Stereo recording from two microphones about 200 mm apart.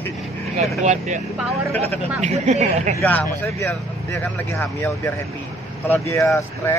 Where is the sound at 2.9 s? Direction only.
10° left (ahead or behind).